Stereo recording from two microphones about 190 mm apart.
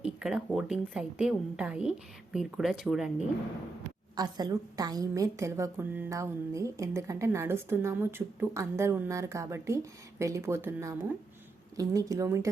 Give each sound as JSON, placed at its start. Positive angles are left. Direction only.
{"t": 0.0, "sound": "a woman's voice", "side_deg": -5}
{"t": 4.2, "sound": "a woman's voice", "side_deg": -20}